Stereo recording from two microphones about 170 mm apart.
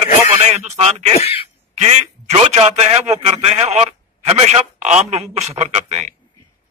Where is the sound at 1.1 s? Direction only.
35° left (ahead or behind).